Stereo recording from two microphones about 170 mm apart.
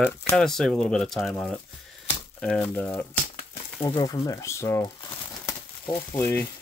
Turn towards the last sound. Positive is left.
turn(degrees=15)  # may be behind; listen again after turning